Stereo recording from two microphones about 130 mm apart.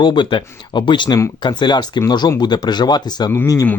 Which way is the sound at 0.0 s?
35° left (ahead or behind).